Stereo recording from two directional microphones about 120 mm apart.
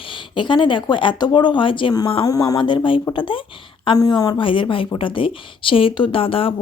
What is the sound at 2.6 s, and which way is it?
Speech, 45° left (ahead or behind).